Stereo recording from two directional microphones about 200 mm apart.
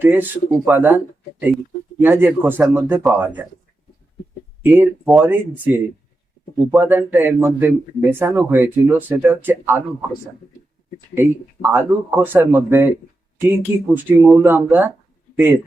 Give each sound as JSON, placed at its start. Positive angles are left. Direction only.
{"t": 0.0, "sound": "speech", "side_deg": -10}
{"t": 4.6, "sound": "speech", "side_deg": -10}
{"t": 11.7, "sound": "speech", "side_deg": -10}